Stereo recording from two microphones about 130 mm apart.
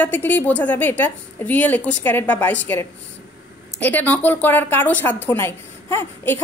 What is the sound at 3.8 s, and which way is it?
A woman's voice, 15° left (ahead or behind).